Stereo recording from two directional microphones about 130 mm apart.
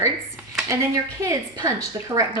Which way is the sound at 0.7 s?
25° right (ahead or behind).